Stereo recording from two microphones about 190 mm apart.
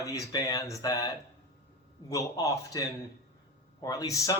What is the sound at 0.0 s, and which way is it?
A man's voice, 20° left (ahead or behind).